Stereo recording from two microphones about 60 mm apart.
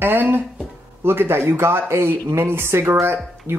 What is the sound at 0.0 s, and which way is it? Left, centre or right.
Speech, right.